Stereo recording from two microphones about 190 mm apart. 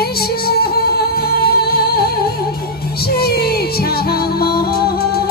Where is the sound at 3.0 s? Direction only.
55° left (ahead or behind).